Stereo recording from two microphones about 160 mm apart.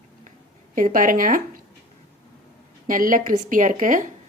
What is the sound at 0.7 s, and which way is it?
Speech, 60° right (ahead or behind).